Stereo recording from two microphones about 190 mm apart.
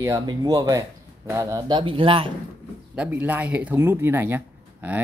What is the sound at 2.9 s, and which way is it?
Speech, 5° right (ahead or behind).